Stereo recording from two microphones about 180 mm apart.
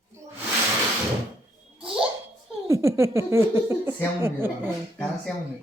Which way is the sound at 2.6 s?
15° right (ahead or behind).